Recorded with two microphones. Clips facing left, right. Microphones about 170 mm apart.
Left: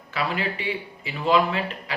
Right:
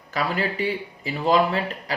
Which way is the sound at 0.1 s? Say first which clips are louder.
Right 2 dB; 40° right (ahead or behind).